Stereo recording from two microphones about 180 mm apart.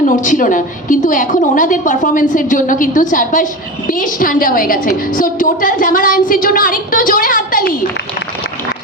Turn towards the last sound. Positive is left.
turn(degrees=50)  # may be behind; listen again after turning